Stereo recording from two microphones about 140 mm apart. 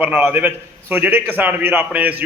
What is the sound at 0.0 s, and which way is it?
Speech, 10° right (ahead or behind).